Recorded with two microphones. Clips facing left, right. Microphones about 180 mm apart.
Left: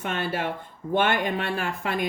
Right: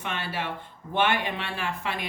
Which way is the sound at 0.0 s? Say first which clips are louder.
Left 4 dB; 45° left (ahead or behind).